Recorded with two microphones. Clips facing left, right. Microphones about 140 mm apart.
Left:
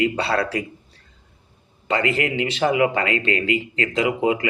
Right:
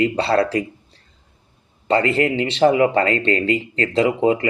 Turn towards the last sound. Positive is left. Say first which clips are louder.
# right 3 dB
turn(degrees=-35)  # may be behind; listen again after turning